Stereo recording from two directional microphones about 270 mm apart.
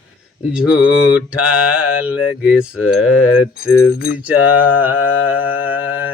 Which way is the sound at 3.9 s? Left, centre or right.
Left.